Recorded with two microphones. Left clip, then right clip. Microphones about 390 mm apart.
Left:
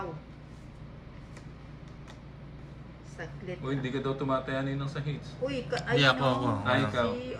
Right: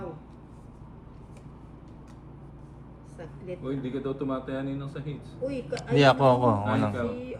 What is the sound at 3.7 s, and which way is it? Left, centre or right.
Speech, left.